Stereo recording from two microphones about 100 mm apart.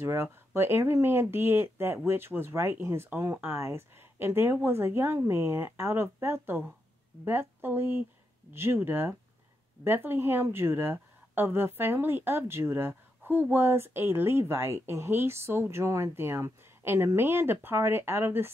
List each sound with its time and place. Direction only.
0.0 s a woman's voice: 25° right (ahead or behind)